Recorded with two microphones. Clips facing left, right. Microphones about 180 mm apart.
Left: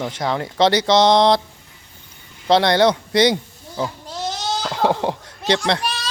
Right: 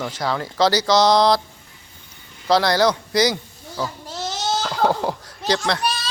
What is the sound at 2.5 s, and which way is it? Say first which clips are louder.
Speech: left 2 dB; 25° left (ahead or behind).